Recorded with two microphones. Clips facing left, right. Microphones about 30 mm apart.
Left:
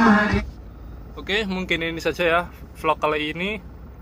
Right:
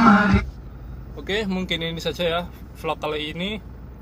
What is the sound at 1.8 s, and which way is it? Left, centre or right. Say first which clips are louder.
Speech: left 3 dB; left.